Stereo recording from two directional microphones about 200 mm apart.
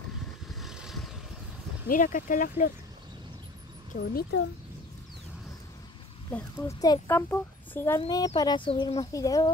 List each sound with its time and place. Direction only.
0.5 s vehicle: centre (ahead or behind)
1.9 s speech: 40° left (ahead or behind)
4.0 s a child's voice: 55° left (ahead or behind)
6.8 s a child's voice: 15° left (ahead or behind)